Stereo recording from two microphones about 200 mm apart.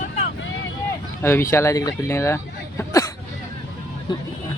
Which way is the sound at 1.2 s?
10° left (ahead or behind).